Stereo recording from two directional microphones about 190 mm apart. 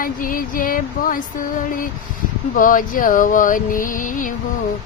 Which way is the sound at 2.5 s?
45° left (ahead or behind).